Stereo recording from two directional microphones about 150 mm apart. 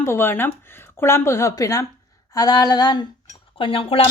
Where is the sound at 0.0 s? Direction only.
15° left (ahead or behind).